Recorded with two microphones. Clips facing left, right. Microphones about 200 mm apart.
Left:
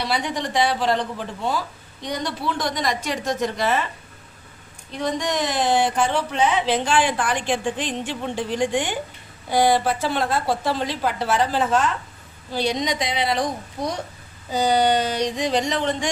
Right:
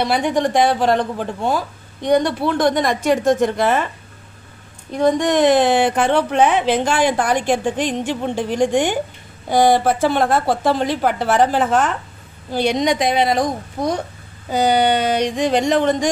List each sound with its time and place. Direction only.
0.0 s speech: 50° right (ahead or behind)
4.9 s speech: 55° right (ahead or behind)
14.5 s speech: 60° right (ahead or behind); by 16.1 s 45° right (ahead or behind)